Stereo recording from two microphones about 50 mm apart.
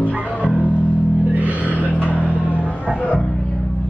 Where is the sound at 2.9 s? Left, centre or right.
Left.